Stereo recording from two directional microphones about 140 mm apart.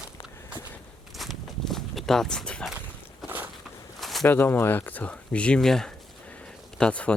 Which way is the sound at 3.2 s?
15° right (ahead or behind).